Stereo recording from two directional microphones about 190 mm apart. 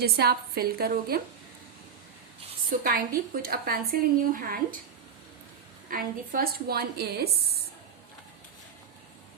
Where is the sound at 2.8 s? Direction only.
50° right (ahead or behind).